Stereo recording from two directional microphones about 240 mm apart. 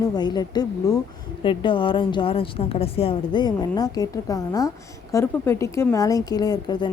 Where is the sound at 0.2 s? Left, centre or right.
Centre.